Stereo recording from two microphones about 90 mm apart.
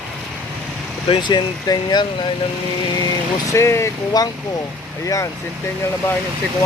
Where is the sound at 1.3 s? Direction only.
50° left (ahead or behind).